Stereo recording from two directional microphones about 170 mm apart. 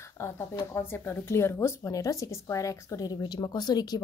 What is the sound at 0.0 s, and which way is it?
Speech, 15° left (ahead or behind).